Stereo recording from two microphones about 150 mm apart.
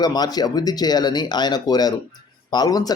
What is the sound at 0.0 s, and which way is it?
Speech, 25° left (ahead or behind).